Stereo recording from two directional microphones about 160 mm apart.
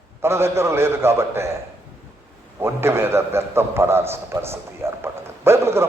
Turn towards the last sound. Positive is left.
turn(degrees=-15)  # may be behind; listen again after turning